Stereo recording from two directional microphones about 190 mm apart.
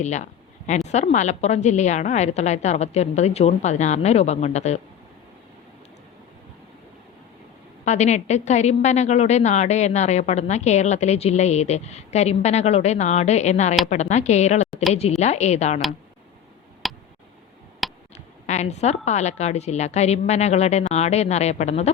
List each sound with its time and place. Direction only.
0.0 s a woman's voice: 40° left (ahead or behind)
7.9 s a woman's voice: 35° left (ahead or behind)
16.8 s tick: centre (ahead or behind)
17.8 s a sound: centre (ahead or behind)
18.4 s a woman's voice: 35° left (ahead or behind)